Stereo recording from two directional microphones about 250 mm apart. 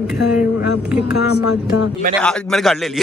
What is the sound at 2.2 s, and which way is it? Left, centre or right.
Speech, centre.